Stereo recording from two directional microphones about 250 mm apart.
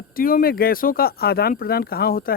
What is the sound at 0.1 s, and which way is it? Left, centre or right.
Speech, left.